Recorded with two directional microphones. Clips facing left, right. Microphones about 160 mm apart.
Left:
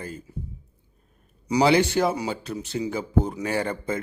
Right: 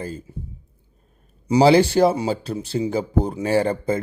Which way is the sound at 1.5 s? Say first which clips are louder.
Right 5 dB; 30° right (ahead or behind).